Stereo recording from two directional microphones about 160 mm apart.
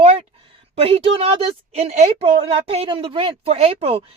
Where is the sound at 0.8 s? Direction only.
35° right (ahead or behind).